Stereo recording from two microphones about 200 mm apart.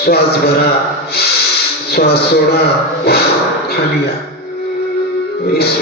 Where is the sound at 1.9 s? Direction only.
50° left (ahead or behind).